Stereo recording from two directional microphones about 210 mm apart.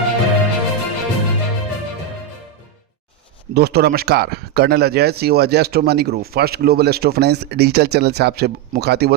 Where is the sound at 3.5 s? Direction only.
50° right (ahead or behind).